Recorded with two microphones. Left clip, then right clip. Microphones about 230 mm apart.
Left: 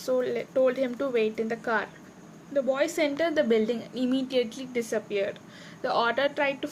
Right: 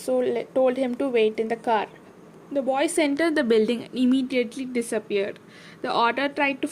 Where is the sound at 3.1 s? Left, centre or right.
Right.